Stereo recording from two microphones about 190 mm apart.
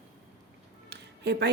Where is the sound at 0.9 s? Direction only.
60° right (ahead or behind).